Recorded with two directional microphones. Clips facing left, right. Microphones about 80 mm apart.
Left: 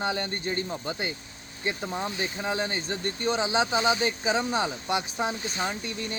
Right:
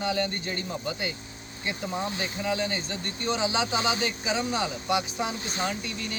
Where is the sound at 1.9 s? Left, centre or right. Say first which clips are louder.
Even; left.